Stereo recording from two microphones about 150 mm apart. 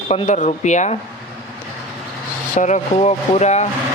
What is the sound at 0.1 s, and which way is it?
Speech, 50° left (ahead or behind).